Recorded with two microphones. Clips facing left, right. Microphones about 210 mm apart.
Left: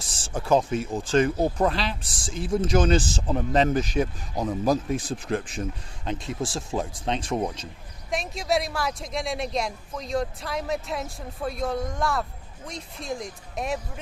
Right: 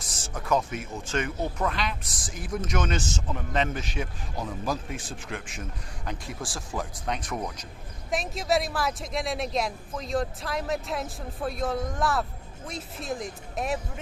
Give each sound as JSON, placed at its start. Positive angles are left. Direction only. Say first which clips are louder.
{"t": 0.0, "sound": "speech", "louder": "left 5 dB", "side_deg": 30}
{"t": 6.1, "sound": "speech", "louder": "left 6 dB", "side_deg": 25}
{"t": 8.1, "sound": "speech", "louder": "even", "side_deg": 0}